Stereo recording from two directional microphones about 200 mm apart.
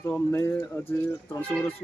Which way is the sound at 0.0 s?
15° left (ahead or behind).